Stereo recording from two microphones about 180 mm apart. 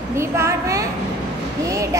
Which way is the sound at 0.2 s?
15° right (ahead or behind).